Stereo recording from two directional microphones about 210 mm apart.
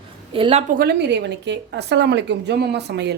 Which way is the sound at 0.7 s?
50° right (ahead or behind).